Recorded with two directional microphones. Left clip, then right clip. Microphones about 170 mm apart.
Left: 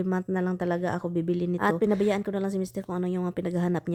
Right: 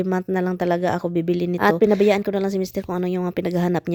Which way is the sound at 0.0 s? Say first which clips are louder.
Right 6 dB; 15° right (ahead or behind).